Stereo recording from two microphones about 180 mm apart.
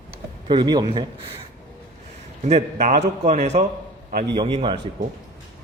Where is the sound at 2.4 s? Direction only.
40° right (ahead or behind).